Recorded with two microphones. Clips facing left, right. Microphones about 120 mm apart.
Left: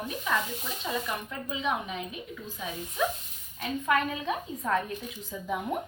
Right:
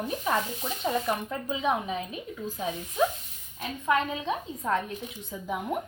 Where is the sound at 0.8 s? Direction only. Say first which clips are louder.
Right 5 dB; 40° right (ahead or behind); by 5.6 s 15° right (ahead or behind).